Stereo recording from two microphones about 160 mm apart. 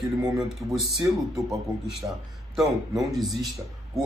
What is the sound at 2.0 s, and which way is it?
Speech, 25° right (ahead or behind).